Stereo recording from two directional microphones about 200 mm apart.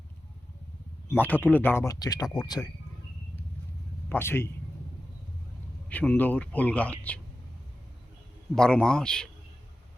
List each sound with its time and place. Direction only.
1.1 s speech: 10° left (ahead or behind)
4.1 s speech: 10° left (ahead or behind)
5.9 s speech: 5° left (ahead or behind)
8.5 s a man's voice: 5° left (ahead or behind)